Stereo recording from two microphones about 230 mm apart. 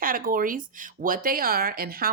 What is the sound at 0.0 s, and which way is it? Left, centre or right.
Speech, right.